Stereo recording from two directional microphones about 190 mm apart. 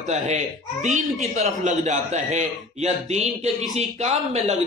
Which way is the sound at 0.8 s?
40° right (ahead or behind).